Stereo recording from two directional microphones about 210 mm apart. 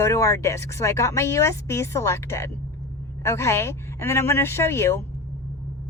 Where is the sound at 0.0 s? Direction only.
15° left (ahead or behind).